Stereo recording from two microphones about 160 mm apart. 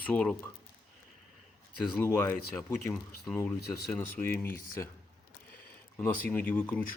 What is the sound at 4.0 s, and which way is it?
Speech, 10° left (ahead or behind).